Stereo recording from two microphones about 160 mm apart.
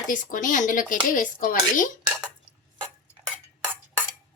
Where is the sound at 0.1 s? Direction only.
55° left (ahead or behind).